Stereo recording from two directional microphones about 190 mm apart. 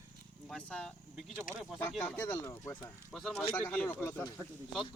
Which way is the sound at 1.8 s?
10° left (ahead or behind).